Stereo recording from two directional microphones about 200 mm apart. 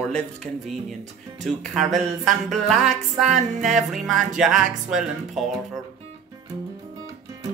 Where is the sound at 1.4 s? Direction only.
Centre (ahead or behind).